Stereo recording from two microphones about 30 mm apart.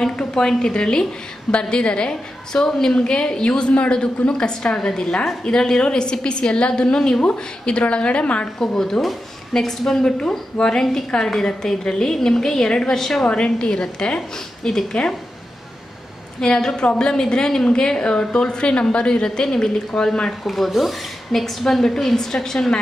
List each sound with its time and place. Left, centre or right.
0.2 s a sound: left
0.6 s a woman's voice: left
3.0 s a woman's voice: left
8.5 s a woman's voice: centre
13.3 s a woman's voice: left
16.3 s a woman's voice: left
19.2 s a woman's voice: left
20.4 s speech: centre
21.6 s a woman's voice: centre